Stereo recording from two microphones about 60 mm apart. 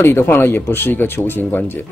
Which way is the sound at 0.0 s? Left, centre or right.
Left.